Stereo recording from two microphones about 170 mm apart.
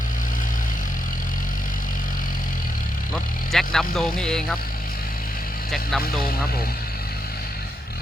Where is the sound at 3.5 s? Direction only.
Centre (ahead or behind).